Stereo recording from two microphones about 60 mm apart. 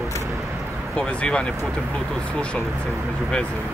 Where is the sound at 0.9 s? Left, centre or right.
Centre.